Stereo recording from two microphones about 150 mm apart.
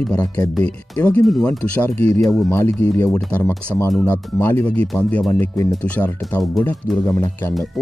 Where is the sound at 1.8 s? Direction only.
15° left (ahead or behind).